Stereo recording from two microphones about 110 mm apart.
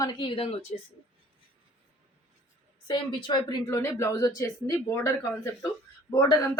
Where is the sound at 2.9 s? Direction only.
45° left (ahead or behind).